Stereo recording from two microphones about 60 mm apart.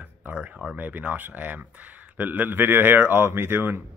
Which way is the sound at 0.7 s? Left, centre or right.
Right.